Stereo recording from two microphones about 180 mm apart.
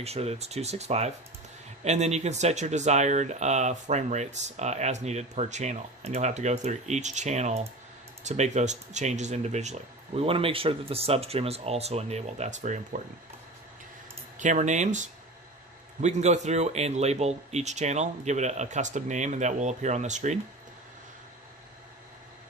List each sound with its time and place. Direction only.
0.0 s speech: 35° right (ahead or behind)
14.3 s speech: 45° right (ahead or behind)